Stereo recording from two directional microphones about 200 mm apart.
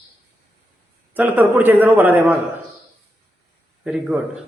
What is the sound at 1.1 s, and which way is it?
A man's voice, 10° right (ahead or behind).